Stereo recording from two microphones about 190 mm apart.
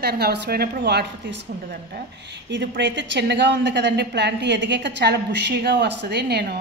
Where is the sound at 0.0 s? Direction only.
55° right (ahead or behind).